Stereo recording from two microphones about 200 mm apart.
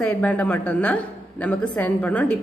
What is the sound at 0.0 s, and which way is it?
A woman's voice, 5° left (ahead or behind).